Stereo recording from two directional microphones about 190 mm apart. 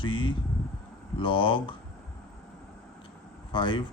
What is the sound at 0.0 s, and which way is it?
Speech, 25° left (ahead or behind).